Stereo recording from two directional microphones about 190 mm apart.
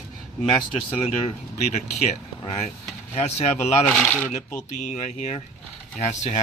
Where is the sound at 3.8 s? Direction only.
Centre (ahead or behind).